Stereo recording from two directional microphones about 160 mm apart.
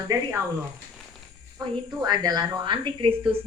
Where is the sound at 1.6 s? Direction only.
20° right (ahead or behind).